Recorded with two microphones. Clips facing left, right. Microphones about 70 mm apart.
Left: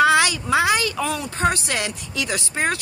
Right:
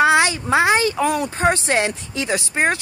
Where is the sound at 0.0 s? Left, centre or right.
Right.